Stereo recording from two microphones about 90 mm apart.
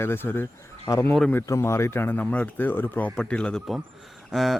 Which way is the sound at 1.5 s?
30° left (ahead or behind).